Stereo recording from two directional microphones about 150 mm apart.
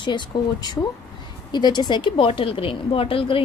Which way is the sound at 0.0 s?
30° left (ahead or behind).